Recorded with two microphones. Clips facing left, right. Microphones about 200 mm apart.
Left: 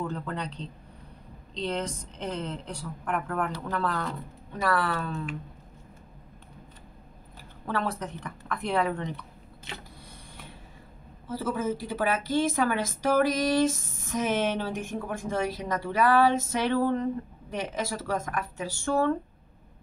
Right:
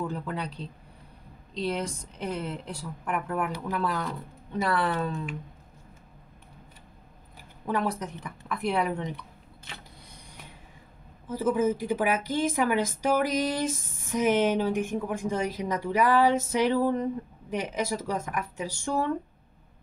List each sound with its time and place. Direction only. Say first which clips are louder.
0.0 s a woman's voice: right 1 dB; 10° right (ahead or behind)
4.6 s speech: right 1 dB; 20° right (ahead or behind)
7.6 s a woman's voice: right 2 dB; 10° right (ahead or behind)
11.2 s a woman's voice: right 4 dB; 15° right (ahead or behind)